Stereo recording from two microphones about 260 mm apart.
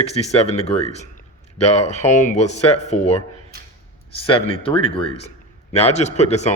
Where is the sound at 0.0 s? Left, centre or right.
Left.